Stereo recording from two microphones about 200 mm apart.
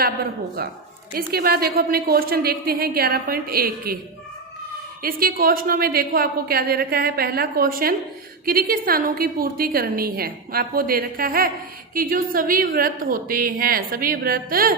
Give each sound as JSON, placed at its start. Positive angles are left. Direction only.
{"t": 1.1, "sound": "a woman's voice", "side_deg": -50}
{"t": 5.0, "sound": "a woman's voice", "side_deg": -45}